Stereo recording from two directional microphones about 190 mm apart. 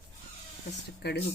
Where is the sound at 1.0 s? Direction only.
60° left (ahead or behind).